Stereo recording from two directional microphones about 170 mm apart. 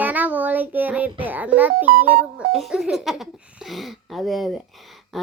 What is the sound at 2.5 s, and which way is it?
A child's voice, centre (ahead or behind).